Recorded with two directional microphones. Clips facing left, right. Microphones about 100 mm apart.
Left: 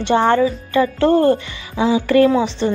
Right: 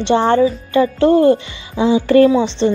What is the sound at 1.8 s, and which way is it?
Speech, 30° right (ahead or behind).